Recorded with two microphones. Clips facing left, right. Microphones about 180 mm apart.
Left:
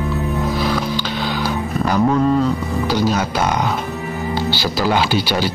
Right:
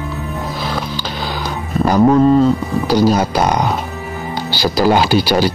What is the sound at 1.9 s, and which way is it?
Speech, 35° right (ahead or behind).